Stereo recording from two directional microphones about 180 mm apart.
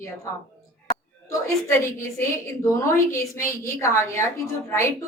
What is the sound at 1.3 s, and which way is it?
A woman's voice, 15° left (ahead or behind).